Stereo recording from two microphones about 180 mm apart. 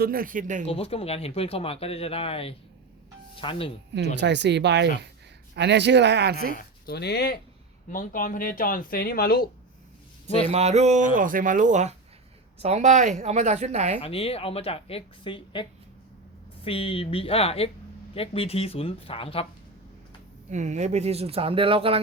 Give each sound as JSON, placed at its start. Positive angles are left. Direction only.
{"t": 0.0, "sound": "speech", "side_deg": -55}
{"t": 0.6, "sound": "speech", "side_deg": 35}
{"t": 4.1, "sound": "speech", "side_deg": -75}
{"t": 6.6, "sound": "speech", "side_deg": 60}
{"t": 7.9, "sound": "speech", "side_deg": 50}
{"t": 10.5, "sound": "speech", "side_deg": -35}
{"t": 14.0, "sound": "speech", "side_deg": 30}
{"t": 16.6, "sound": "speech", "side_deg": 30}
{"t": 20.5, "sound": "speech", "side_deg": -40}